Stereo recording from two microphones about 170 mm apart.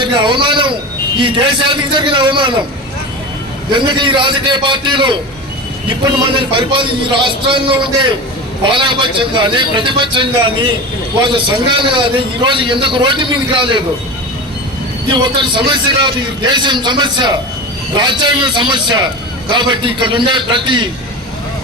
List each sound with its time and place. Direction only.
0.0 s a sound: 25° right (ahead or behind)
1.2 s a man's voice: 30° right (ahead or behind)
3.7 s a man's voice: 25° right (ahead or behind)
6.2 s a man's voice: 30° right (ahead or behind)
15.1 s a man's voice: 25° right (ahead or behind)